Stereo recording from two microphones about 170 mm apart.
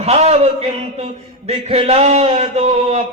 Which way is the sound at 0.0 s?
40° right (ahead or behind).